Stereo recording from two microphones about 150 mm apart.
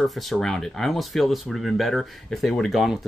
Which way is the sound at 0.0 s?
Centre (ahead or behind).